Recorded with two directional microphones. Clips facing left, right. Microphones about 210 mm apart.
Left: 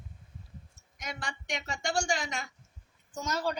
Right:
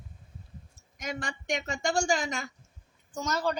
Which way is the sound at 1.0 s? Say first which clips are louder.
Right 5 dB; 45° right (ahead or behind).